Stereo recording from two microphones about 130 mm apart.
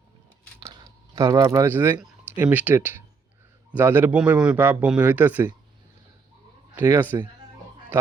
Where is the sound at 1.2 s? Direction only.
25° right (ahead or behind).